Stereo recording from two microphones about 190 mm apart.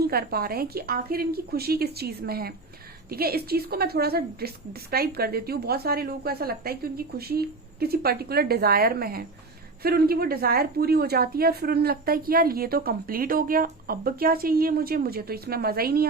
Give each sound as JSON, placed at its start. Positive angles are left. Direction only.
{"t": 0.0, "sound": "a woman's voice", "side_deg": -55}